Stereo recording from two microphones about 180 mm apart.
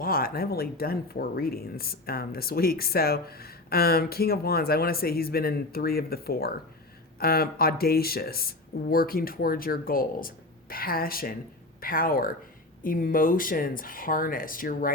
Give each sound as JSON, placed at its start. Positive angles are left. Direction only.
{"t": 0.0, "sound": "speech", "side_deg": 55}